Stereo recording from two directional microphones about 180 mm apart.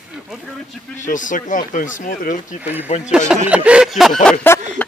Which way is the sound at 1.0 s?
45° left (ahead or behind).